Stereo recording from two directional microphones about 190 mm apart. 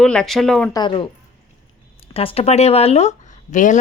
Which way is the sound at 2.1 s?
30° left (ahead or behind).